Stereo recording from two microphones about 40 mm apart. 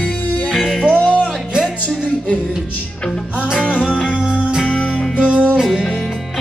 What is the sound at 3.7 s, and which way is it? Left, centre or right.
Music, left.